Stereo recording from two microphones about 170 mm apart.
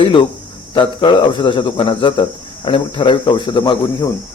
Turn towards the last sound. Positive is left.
turn(degrees=25)  # may be behind; listen again after turning